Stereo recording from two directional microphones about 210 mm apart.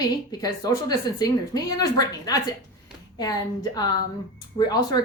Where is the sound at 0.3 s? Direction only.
20° left (ahead or behind).